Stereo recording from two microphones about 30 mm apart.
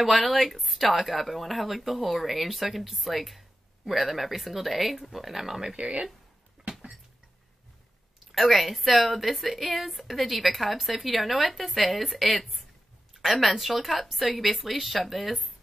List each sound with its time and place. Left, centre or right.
0.0 s speech: centre
5.8 s speech: right
8.3 s speech: centre